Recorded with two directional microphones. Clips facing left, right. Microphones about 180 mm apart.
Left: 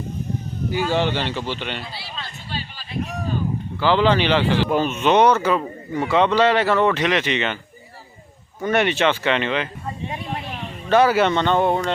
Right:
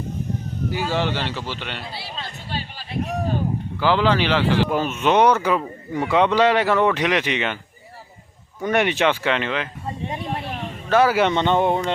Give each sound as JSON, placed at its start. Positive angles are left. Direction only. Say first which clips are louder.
{"t": 0.7, "sound": "speech", "louder": "left 3 dB", "side_deg": -5}
{"t": 2.7, "sound": "a sound", "louder": "right 3 dB", "side_deg": -55}
{"t": 3.8, "sound": "speech", "louder": "left 1 dB", "side_deg": -5}
{"t": 8.6, "sound": "speech", "louder": "even", "side_deg": -15}
{"t": 9.2, "sound": "speech", "louder": "left 2 dB", "side_deg": 0}
{"t": 10.8, "sound": "speech", "louder": "left 1 dB", "side_deg": -5}